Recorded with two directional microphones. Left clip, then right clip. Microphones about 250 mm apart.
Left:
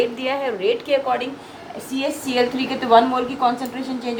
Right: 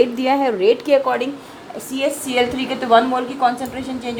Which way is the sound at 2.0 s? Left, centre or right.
Right.